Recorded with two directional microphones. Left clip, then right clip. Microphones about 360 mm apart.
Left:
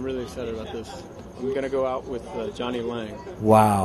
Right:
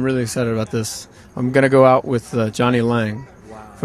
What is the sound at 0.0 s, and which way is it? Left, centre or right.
Speech, right.